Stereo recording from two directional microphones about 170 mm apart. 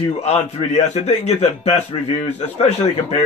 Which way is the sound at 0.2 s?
40° left (ahead or behind).